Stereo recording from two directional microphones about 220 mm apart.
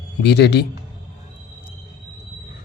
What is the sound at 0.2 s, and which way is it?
Speech, 50° left (ahead or behind).